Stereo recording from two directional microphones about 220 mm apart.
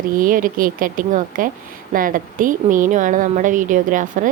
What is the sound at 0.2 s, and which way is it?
A woman's voice, 40° right (ahead or behind).